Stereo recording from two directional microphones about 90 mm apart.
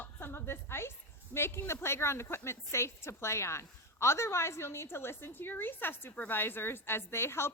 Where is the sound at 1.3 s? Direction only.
25° left (ahead or behind).